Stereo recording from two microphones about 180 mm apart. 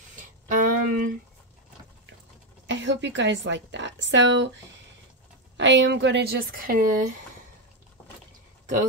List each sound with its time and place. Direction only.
0.1 s music: 45° right (ahead or behind)
2.6 s a woman's voice: 90° right
5.6 s speech: 80° right; by 7.2 s 45° right (ahead or behind)
8.0 s vehicle: 5° left (ahead or behind)